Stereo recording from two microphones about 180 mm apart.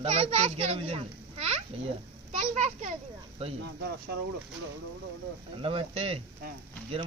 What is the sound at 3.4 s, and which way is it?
Speech, 35° right (ahead or behind).